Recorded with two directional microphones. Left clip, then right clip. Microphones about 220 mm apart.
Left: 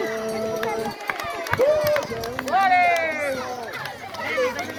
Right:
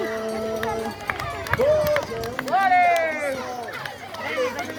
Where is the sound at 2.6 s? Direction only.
35° right (ahead or behind).